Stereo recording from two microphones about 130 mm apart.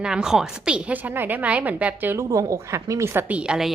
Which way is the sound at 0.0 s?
5° right (ahead or behind).